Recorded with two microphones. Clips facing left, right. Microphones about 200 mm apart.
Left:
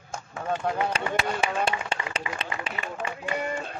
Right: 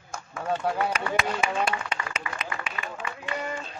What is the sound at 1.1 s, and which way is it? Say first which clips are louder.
Speech: even; 30° left (ahead or behind).